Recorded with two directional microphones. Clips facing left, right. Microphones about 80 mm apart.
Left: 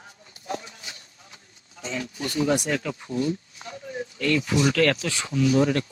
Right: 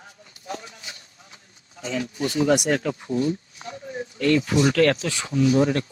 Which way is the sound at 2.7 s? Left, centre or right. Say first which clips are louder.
Right 4 dB; right.